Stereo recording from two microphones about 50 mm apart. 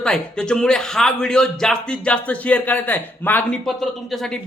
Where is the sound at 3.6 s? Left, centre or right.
Centre.